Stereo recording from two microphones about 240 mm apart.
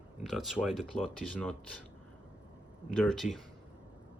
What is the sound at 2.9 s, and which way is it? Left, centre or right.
Speech, centre.